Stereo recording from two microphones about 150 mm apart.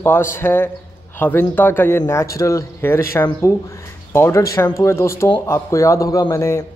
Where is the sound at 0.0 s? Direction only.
15° left (ahead or behind).